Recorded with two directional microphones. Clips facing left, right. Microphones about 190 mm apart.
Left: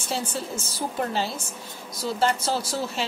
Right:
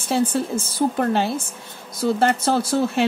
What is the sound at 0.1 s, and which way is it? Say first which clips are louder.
Speech: right 9 dB; 55° right (ahead or behind).